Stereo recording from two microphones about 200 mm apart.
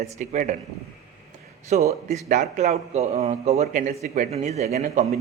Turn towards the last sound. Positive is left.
turn(degrees=-35)  # may be behind; listen again after turning